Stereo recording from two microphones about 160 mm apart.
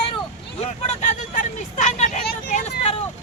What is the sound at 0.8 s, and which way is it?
Vehicle, 45° left (ahead or behind).